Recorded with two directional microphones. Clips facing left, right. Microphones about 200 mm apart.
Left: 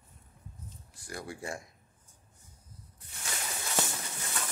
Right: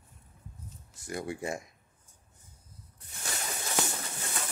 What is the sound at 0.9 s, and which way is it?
Speech, 20° right (ahead or behind).